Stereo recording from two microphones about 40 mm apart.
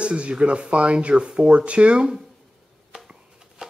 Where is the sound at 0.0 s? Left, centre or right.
Right.